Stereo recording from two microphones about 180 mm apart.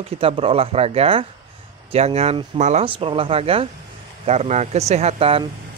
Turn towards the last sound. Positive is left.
turn(degrees=-30)  # may be behind; listen again after turning